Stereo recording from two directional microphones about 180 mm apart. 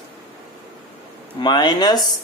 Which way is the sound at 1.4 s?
25° left (ahead or behind).